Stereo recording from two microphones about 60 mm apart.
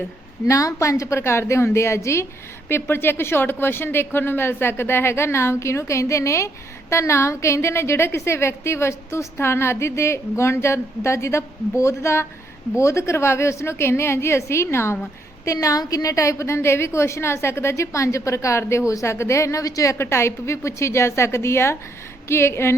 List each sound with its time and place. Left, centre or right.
0.4 s a woman's voice: left
2.6 s a woman's voice: left
15.4 s a woman's voice: left
20.0 s a woman's voice: left